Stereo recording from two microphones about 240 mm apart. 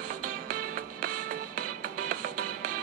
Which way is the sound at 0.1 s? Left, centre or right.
Right.